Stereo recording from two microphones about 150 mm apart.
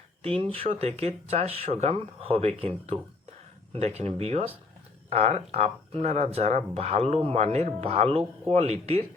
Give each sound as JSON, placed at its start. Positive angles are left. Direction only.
{"t": 0.5, "sound": "speech", "side_deg": -40}